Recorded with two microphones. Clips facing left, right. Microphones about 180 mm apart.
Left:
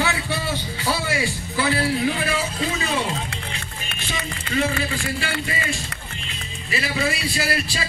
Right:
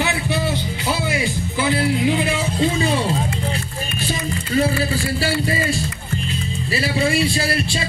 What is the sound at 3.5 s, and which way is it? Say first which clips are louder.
Speech: right 8 dB; 40° right (ahead or behind).